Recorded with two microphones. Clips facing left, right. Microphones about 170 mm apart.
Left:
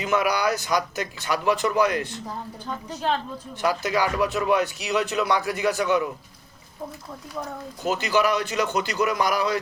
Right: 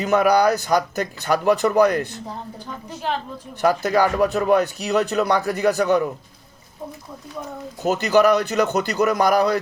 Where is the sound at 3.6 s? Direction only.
45° right (ahead or behind).